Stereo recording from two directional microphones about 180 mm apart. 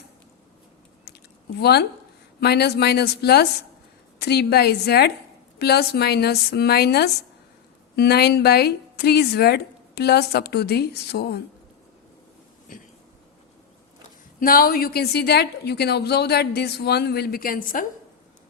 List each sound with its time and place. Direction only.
1.1 s chewing: 65° left (ahead or behind)
1.5 s a woman's voice: 65° left (ahead or behind)
14.3 s a woman's voice: 55° left (ahead or behind)